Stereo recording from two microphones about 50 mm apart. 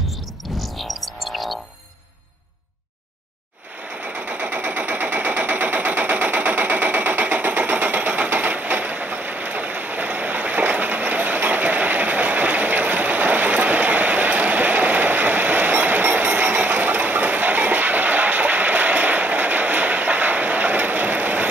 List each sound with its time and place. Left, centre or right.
0.7 s music: centre
3.9 s machine gun: right